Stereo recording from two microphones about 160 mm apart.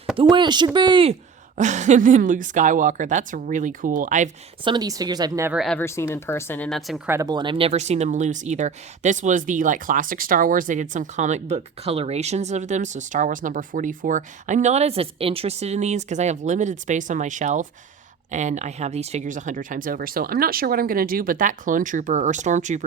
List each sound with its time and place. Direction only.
0.2 s a woman's voice: 30° right (ahead or behind)
1.5 s speech: 50° right (ahead or behind)
4.6 s a woman's voice: 25° right (ahead or behind)
5.5 s speech: centre (ahead or behind)
5.8 s speech: 15° left (ahead or behind); by 7.0 s centre (ahead or behind)
7.1 s speech: 20° right (ahead or behind); by 22.8 s 50° right (ahead or behind)